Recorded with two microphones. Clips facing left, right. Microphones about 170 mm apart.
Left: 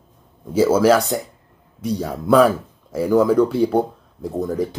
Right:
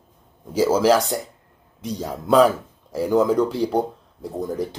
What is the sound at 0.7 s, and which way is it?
Speech, 15° right (ahead or behind).